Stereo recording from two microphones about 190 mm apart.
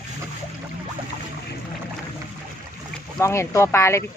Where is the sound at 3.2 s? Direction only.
15° left (ahead or behind).